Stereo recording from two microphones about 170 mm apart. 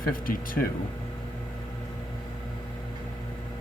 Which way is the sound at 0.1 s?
55° left (ahead or behind).